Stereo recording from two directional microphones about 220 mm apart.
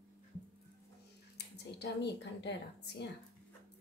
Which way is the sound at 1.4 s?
50° left (ahead or behind).